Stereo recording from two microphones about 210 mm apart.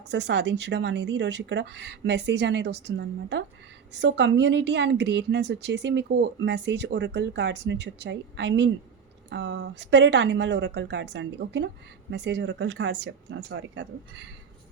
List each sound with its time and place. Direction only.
0.1 s a woman's voice: 55° right (ahead or behind)